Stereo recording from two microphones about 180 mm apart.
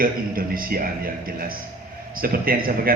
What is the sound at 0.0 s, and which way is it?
A man's voice, 55° right (ahead or behind).